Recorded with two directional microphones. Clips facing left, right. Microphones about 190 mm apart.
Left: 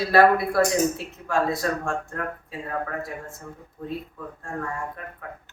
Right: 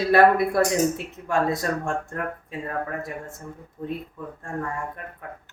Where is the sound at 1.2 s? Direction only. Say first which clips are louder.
Even; 20° right (ahead or behind).